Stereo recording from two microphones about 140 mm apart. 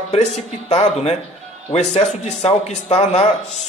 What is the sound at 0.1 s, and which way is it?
Speech, 50° left (ahead or behind).